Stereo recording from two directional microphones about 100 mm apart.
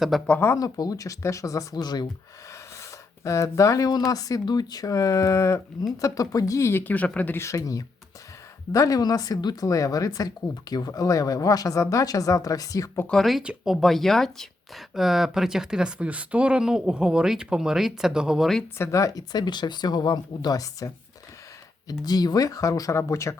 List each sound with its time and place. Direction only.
0.3 s speech: 20° left (ahead or behind)
0.5 s speech: 40° left (ahead or behind)
3.2 s speech: 30° left (ahead or behind); by 7.3 s 15° left (ahead or behind)
7.3 s speech: 30° left (ahead or behind)
13.1 s speech: centre (ahead or behind)
13.4 s speech: 10° right (ahead or behind)
13.7 s speech: centre (ahead or behind)
18.8 s speech: 30° left (ahead or behind)
22.0 s speech: 40° left (ahead or behind)